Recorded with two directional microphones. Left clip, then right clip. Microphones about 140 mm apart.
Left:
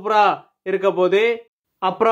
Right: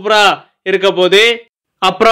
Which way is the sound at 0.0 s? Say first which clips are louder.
Right 6 dB; 5° right (ahead or behind).